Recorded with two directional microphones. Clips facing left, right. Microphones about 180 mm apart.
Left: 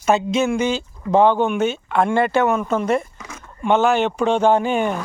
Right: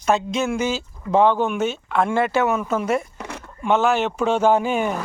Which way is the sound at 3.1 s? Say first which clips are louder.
Right 5 dB; 60° right (ahead or behind).